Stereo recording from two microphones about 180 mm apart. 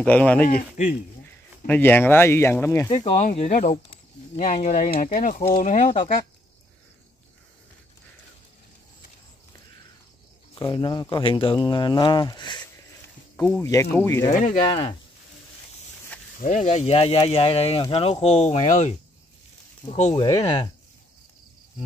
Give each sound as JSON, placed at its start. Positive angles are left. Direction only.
{"t": 0.0, "sound": "speech", "side_deg": 10}
{"t": 0.5, "sound": "speech", "side_deg": 45}
{"t": 1.7, "sound": "speech", "side_deg": 10}
{"t": 2.9, "sound": "speech", "side_deg": 35}
{"t": 10.5, "sound": "speech", "side_deg": 25}
{"t": 14.6, "sound": "speech", "side_deg": 30}
{"t": 16.3, "sound": "speech", "side_deg": 45}
{"t": 20.2, "sound": "speech", "side_deg": 25}